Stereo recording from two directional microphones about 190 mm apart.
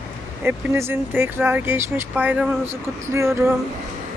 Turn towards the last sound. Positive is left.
turn(degrees=-15)  # may be behind; listen again after turning